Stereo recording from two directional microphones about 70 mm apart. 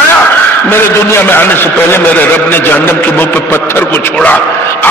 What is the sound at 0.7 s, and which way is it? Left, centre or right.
A man's voice, left.